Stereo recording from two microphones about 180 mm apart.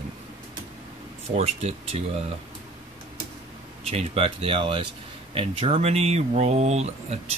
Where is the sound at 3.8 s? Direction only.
35° right (ahead or behind).